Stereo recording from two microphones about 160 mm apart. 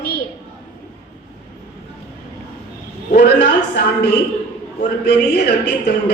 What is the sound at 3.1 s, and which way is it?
A man's voice, 90° left.